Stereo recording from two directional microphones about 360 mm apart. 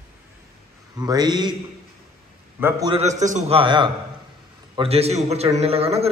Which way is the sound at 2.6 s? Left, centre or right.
Centre.